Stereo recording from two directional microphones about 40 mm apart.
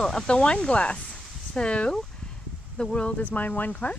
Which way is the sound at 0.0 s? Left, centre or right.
Left.